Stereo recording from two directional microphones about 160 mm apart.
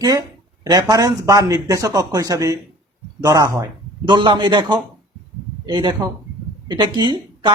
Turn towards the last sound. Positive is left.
turn(degrees=-30)  # may be behind; listen again after turning